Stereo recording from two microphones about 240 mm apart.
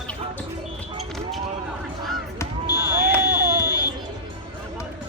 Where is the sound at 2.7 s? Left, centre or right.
Centre.